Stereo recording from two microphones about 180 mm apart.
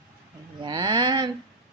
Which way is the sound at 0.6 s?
25° right (ahead or behind).